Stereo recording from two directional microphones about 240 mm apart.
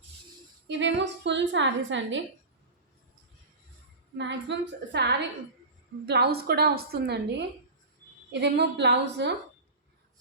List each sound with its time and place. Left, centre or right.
0.7 s a woman's voice: right
4.2 s a woman's voice: right